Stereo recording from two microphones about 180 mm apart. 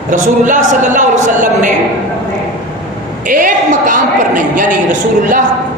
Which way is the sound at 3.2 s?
50° right (ahead or behind).